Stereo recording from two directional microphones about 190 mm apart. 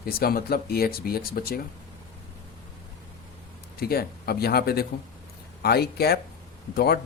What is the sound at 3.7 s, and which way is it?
Speech, 55° left (ahead or behind).